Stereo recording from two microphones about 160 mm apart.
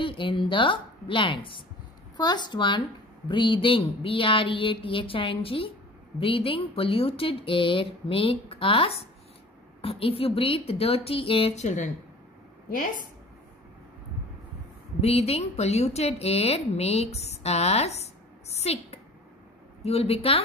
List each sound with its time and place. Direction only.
0.0 s a woman's voice: 30° left (ahead or behind); by 11.9 s 45° left (ahead or behind)
15.0 s a woman's voice: 40° left (ahead or behind)